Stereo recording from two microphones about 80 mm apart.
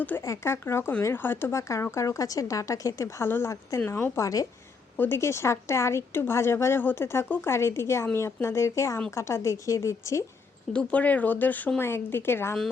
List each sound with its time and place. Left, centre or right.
0.2 s speech: left
3.2 s speech: left
10.7 s speech: centre